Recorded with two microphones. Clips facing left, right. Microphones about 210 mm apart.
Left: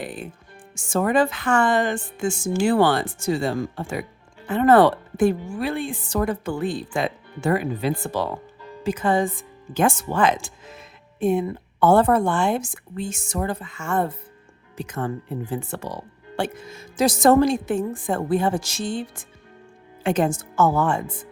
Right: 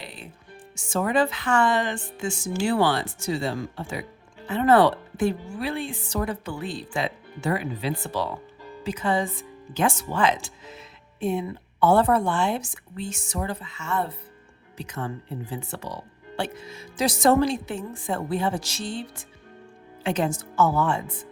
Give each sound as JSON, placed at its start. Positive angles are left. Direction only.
{"t": 0.0, "sound": "music", "side_deg": 50}
{"t": 0.8, "sound": "a woman's voice", "side_deg": 50}